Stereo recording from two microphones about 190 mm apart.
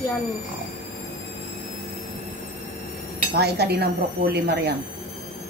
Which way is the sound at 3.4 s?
60° right (ahead or behind).